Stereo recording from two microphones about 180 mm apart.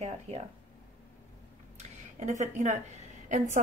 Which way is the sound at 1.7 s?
40° right (ahead or behind).